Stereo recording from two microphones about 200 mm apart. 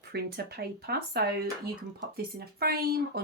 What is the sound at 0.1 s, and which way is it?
Speech, 55° right (ahead or behind).